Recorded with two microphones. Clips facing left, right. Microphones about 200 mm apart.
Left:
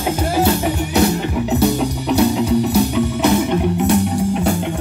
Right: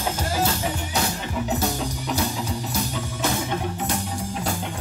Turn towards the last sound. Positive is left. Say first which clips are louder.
# left 11 dB
turn(degrees=65)  # may be behind; listen again after turning